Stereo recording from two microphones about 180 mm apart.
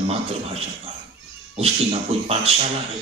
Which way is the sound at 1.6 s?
35° right (ahead or behind).